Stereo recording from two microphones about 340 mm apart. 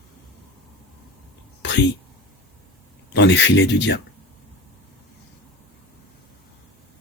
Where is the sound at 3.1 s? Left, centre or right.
Left.